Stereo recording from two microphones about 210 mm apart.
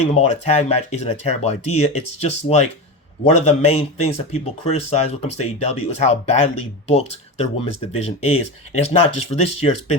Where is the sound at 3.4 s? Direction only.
30° left (ahead or behind).